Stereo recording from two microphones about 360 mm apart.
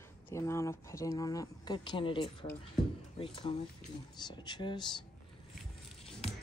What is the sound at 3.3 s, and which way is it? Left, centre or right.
Speech, centre.